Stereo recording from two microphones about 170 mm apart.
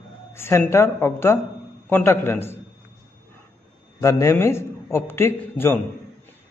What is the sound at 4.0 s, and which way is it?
A man's voice, 15° left (ahead or behind).